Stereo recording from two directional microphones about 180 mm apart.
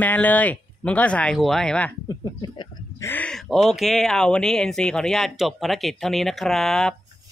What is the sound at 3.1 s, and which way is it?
Speech, 5° left (ahead or behind).